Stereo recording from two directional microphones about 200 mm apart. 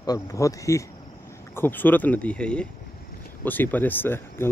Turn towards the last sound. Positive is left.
turn(degrees=10)  # may be behind; listen again after turning